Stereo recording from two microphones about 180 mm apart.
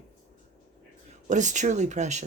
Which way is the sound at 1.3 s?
40° right (ahead or behind).